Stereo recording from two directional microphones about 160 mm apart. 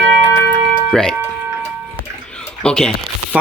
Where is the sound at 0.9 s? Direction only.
5° left (ahead or behind).